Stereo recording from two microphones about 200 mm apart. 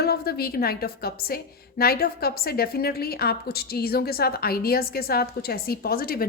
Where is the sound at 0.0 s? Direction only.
50° left (ahead or behind).